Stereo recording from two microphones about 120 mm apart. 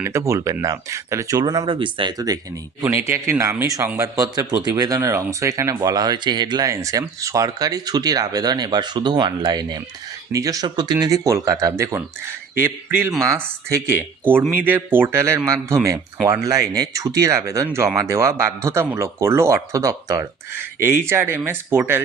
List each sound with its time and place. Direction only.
0.0 s speech: 25° right (ahead or behind)
2.8 s speech: 20° right (ahead or behind); by 6.7 s 40° right (ahead or behind)
6.7 s a man's voice: 25° right (ahead or behind)